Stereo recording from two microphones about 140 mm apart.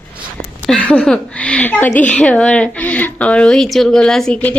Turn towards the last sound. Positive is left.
turn(degrees=10)  # may be behind; listen again after turning